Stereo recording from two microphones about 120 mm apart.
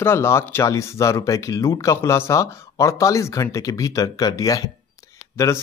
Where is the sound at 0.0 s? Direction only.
20° left (ahead or behind).